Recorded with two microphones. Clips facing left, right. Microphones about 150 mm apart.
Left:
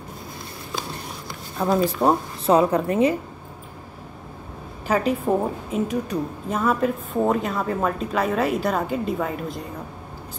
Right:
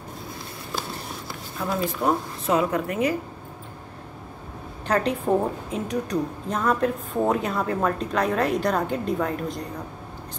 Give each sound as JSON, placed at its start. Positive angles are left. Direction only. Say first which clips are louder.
{"t": 1.6, "sound": "a woman's voice", "louder": "left 5 dB", "side_deg": 35}
{"t": 4.8, "sound": "a woman's voice", "louder": "left 1 dB", "side_deg": 5}